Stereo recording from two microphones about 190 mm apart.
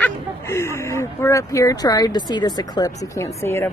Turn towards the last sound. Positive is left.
turn(degrees=15)  # may be behind; listen again after turning